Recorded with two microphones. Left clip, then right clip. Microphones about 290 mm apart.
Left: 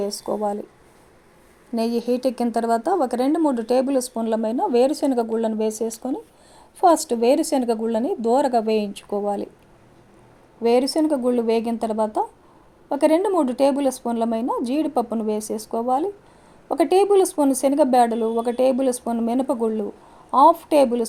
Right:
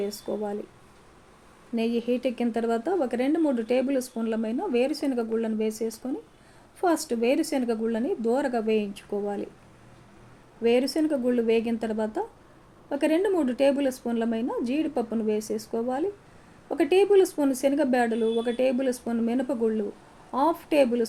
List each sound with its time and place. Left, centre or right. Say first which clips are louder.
0.0 s speech: left 6 dB; left
2.0 s speech: left 6 dB; left
10.6 s speech: left 5 dB; left